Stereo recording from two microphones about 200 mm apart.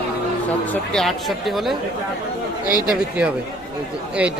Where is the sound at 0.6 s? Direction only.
5° left (ahead or behind).